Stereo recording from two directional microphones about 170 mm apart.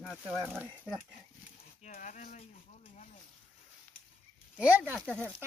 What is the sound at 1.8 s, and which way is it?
Speech, 45° left (ahead or behind).